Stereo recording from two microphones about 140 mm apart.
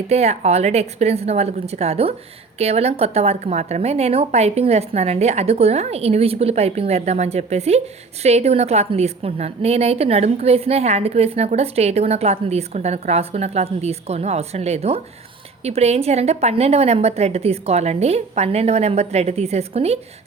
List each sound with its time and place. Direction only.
0.1 s a woman's voice: 50° right (ahead or behind)